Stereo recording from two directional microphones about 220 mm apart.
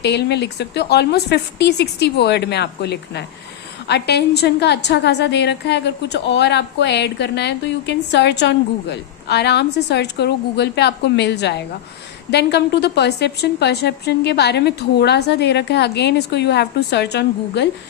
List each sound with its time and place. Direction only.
0.0 s a woman's voice: 50° left (ahead or behind)